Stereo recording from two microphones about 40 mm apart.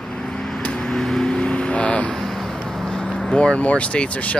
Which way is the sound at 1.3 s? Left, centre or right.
Left.